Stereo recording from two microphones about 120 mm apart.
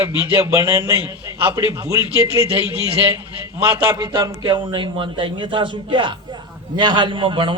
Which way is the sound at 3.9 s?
35° right (ahead or behind).